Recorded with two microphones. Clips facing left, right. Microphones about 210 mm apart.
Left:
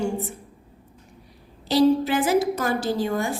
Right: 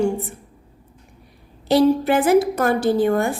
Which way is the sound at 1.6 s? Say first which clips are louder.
Right 3 dB; 55° right (ahead or behind).